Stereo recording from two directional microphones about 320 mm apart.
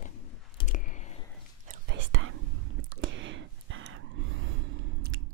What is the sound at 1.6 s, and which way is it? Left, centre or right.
Whispering, right.